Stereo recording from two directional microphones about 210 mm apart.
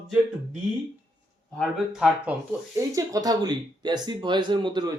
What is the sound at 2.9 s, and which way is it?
Speech, 15° right (ahead or behind).